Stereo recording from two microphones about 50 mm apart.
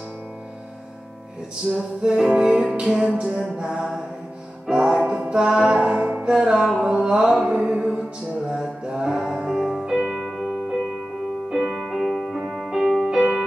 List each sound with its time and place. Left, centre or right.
2.0 s music: centre
2.9 s a sound: centre
4.6 s music: centre